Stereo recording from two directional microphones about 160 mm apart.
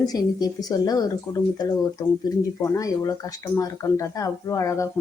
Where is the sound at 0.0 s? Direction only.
25° left (ahead or behind).